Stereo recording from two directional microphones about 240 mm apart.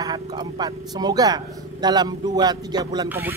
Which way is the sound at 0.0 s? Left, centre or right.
Centre.